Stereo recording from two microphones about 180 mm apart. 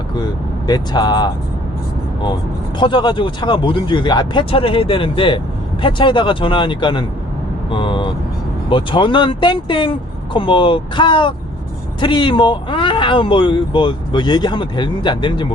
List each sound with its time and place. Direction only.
0.7 s speech: 25° left (ahead or behind)
2.7 s speech: 25° left (ahead or behind)